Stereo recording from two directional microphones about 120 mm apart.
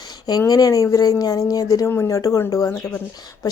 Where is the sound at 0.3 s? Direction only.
30° left (ahead or behind).